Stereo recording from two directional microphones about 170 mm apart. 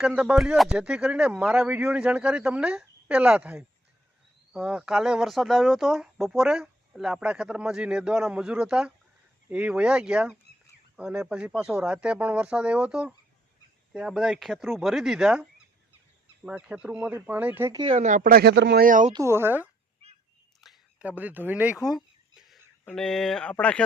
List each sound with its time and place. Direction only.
0.0 s speech: 5° right (ahead or behind)
17.9 s a man's voice: 50° right (ahead or behind); by 18.9 s 80° right
18.9 s speech: 50° right (ahead or behind)
19.1 s speech: 15° right (ahead or behind); by 23.8 s 5° left (ahead or behind)